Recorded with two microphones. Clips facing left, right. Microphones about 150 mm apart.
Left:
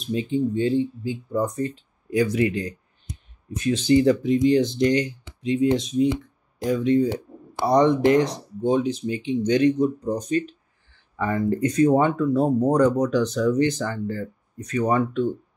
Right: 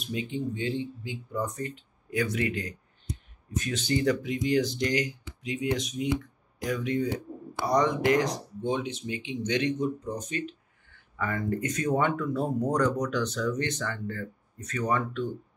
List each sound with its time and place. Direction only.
0.1 s speech: 30° left (ahead or behind)